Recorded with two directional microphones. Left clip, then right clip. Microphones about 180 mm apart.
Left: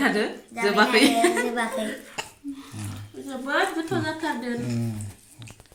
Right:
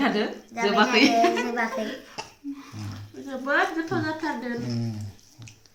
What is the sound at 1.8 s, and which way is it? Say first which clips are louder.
Speech: left 1 dB; 40° right (ahead or behind).